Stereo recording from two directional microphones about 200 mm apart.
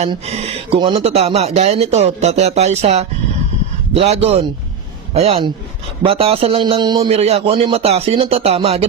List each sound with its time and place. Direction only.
0.0 s speech: 30° right (ahead or behind)
6.0 s music: 30° right (ahead or behind)